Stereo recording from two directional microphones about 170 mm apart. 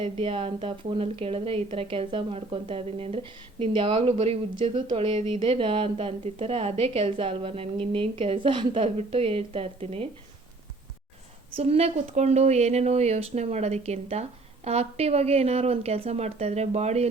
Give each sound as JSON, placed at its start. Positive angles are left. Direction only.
{"t": 0.0, "sound": "speech", "side_deg": -30}
{"t": 11.5, "sound": "speech", "side_deg": -35}